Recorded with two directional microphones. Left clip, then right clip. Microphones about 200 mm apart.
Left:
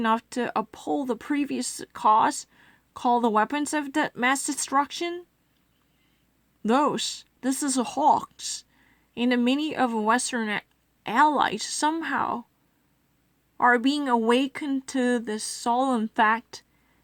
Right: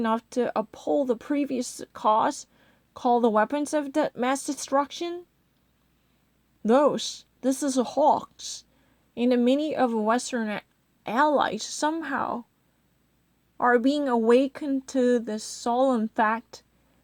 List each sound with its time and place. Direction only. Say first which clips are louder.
0.0 s speech: left 1 dB; 15° left (ahead or behind)
6.6 s speech: right 2 dB; 15° left (ahead or behind)
13.6 s a woman's voice: left 1 dB; 20° left (ahead or behind)